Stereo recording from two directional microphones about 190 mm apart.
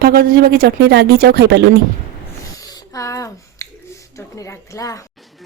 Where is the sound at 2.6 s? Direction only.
20° left (ahead or behind).